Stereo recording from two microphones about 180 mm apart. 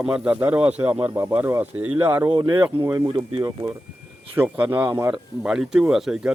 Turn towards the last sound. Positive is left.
turn(degrees=0)  # may be behind; listen again after turning